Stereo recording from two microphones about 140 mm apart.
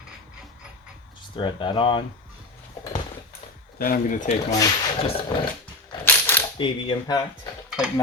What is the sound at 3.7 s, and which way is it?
Speech, 90° left.